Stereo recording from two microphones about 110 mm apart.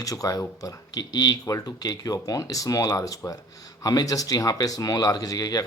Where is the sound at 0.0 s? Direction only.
30° left (ahead or behind).